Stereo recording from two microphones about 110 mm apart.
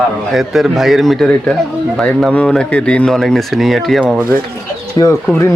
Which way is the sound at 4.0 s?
15° right (ahead or behind).